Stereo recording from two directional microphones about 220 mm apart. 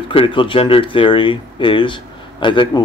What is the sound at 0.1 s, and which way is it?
Speech, 25° left (ahead or behind).